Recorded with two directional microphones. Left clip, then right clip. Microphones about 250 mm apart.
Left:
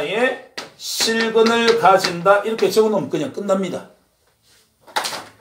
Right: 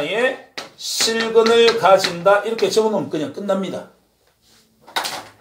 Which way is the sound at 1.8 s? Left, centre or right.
Centre.